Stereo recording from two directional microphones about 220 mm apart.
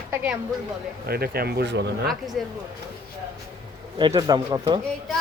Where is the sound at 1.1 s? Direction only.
45° right (ahead or behind).